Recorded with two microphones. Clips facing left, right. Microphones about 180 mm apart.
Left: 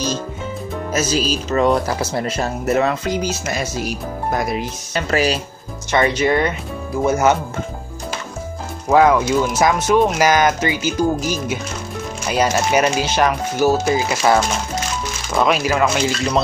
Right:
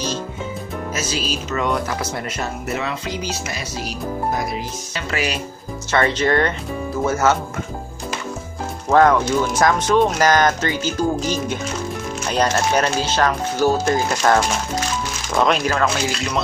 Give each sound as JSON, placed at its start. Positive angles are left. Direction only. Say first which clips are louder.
{"t": 0.9, "sound": "speech", "louder": "left 7 dB", "side_deg": 40}
{"t": 4.9, "sound": "speech", "louder": "left 6 dB", "side_deg": 40}
{"t": 5.9, "sound": "speech", "louder": "left 2 dB", "side_deg": 15}
{"t": 8.8, "sound": "speech", "louder": "left 1 dB", "side_deg": 10}